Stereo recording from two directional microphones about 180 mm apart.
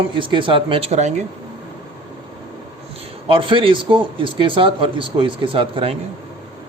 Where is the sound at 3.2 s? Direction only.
30° right (ahead or behind).